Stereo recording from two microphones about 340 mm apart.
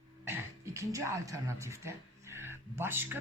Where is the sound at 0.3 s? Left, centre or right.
Centre.